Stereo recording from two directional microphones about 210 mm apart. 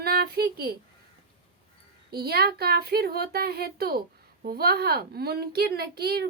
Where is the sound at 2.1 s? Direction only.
50° right (ahead or behind).